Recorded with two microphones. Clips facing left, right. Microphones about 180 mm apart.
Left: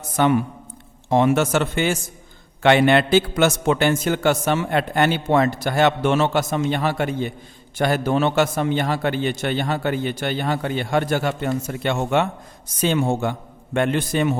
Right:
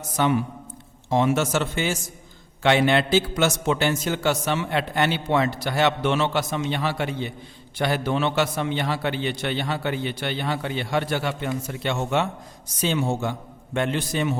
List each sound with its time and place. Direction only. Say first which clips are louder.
0.2 s a man's voice: left 4 dB; 55° left (ahead or behind)